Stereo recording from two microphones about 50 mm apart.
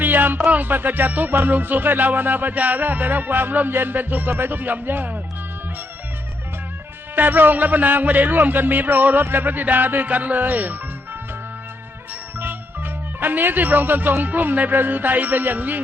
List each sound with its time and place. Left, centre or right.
0.0 s music: right
0.5 s speech: right
7.2 s speech: right
12.4 s speech: right